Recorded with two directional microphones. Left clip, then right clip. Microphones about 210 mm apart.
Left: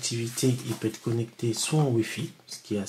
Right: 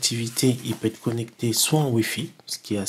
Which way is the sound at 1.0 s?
35° right (ahead or behind).